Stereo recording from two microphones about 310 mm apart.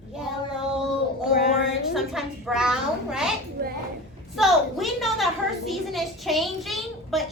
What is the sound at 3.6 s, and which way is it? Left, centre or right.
Speech, right.